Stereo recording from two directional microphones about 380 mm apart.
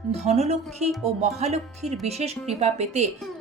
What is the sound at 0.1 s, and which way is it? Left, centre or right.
Speech, centre.